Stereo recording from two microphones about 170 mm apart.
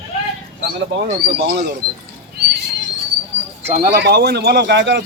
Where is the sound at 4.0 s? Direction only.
65° right (ahead or behind); by 5.0 s 90° right.